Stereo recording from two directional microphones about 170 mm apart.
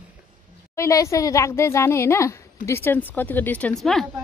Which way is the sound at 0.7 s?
15° left (ahead or behind).